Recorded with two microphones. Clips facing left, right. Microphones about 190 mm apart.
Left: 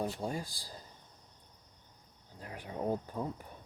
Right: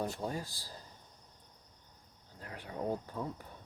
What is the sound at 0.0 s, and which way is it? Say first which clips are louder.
Speech: left 1 dB; 15° left (ahead or behind).